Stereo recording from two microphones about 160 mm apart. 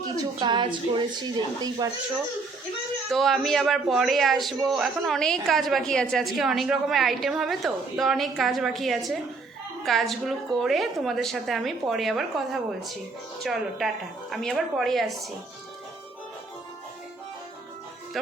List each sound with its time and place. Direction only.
0.3 s a woman's voice: 30° right (ahead or behind)
3.1 s a man's voice: centre (ahead or behind)